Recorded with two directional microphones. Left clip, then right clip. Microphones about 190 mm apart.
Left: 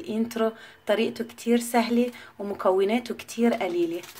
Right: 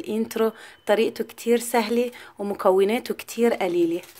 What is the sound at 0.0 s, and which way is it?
Speech, 35° right (ahead or behind).